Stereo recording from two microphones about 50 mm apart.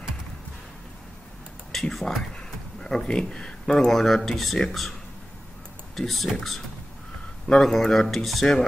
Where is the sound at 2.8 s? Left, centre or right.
Centre.